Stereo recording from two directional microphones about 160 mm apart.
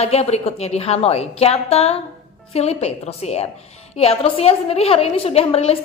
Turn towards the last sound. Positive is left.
turn(degrees=40)  # may be behind; listen again after turning